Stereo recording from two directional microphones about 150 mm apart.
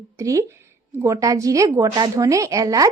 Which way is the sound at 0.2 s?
20° right (ahead or behind).